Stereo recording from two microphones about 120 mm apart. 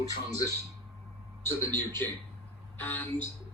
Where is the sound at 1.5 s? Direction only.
15° left (ahead or behind).